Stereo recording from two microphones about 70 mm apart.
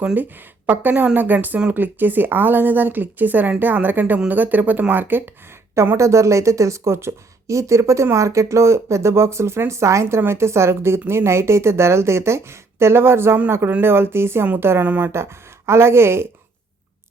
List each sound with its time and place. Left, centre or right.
0.0 s a woman's voice: right
5.7 s a woman's voice: right
15.1 s a woman's voice: right